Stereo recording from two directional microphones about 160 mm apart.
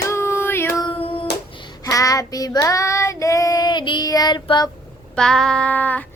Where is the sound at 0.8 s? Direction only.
35° left (ahead or behind).